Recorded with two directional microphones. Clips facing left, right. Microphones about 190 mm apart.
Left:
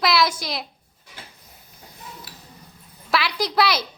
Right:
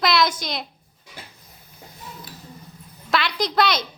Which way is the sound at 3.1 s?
5° left (ahead or behind).